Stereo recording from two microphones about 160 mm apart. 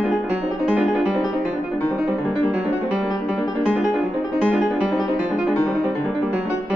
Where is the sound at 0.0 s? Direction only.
Centre (ahead or behind).